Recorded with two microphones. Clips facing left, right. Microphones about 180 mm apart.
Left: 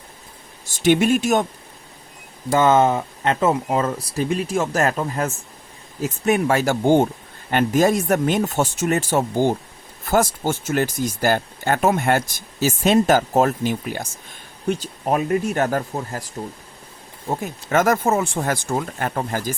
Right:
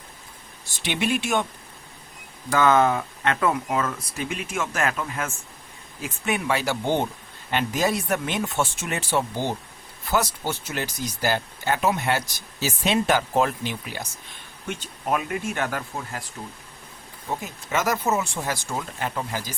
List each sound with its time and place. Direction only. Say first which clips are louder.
0.6 s speech: left 10 dB; 45° left (ahead or behind)
2.5 s speech: left 3 dB; 25° left (ahead or behind)
17.2 s speech: left 5 dB; 50° left (ahead or behind)